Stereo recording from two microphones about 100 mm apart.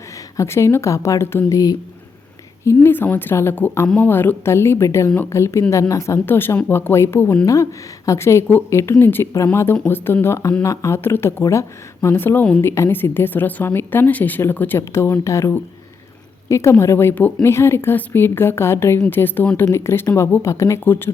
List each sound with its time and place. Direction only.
0.3 s a woman's voice: 25° left (ahead or behind)
2.6 s a woman's voice: 20° left (ahead or behind)
12.6 s a woman's voice: 25° left (ahead or behind)